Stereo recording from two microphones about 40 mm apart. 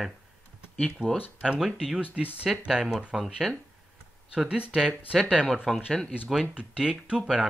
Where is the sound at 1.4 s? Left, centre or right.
Centre.